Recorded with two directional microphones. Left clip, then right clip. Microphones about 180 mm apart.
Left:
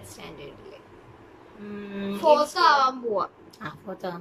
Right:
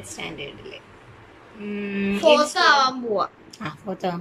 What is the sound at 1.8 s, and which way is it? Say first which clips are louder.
Speech: right 6 dB; 5° right (ahead or behind).